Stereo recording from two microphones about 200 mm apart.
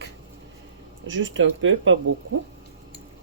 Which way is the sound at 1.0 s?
70° right (ahead or behind).